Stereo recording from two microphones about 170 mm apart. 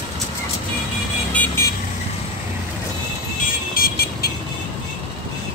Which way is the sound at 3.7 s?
65° left (ahead or behind).